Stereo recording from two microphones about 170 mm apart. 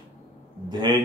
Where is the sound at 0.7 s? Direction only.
25° right (ahead or behind).